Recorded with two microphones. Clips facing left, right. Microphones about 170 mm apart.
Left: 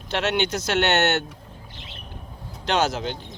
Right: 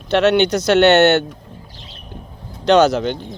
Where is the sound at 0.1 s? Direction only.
70° right (ahead or behind).